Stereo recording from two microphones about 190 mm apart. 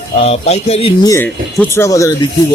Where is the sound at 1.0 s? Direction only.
15° left (ahead or behind).